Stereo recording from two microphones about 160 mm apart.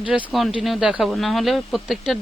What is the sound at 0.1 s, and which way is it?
Speech, centre (ahead or behind).